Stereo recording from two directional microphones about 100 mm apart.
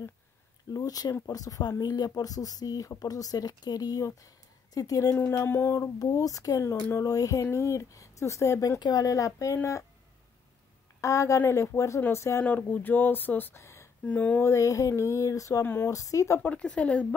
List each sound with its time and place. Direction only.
0.7 s speech: 40° left (ahead or behind)
5.1 s speech: 25° left (ahead or behind)
11.0 s speech: 30° left (ahead or behind)
14.0 s speech: 15° left (ahead or behind)
14.4 s speech: 30° left (ahead or behind)
15.6 s speech: 20° left (ahead or behind)
15.9 s speech: 35° left (ahead or behind)
16.4 s speech: 10° left (ahead or behind)